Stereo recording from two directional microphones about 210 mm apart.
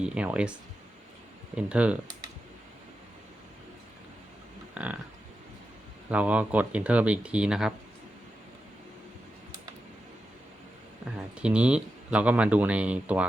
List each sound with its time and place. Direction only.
0.0 s speech: 5° right (ahead or behind)
1.5 s speech: 5° right (ahead or behind)
4.7 s a sound: 5° right (ahead or behind)
6.1 s speech: 5° right (ahead or behind)
11.0 s speech: 5° right (ahead or behind)